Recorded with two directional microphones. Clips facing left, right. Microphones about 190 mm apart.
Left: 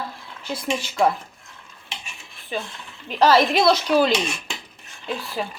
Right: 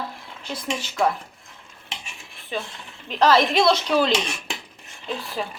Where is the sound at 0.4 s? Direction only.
10° left (ahead or behind).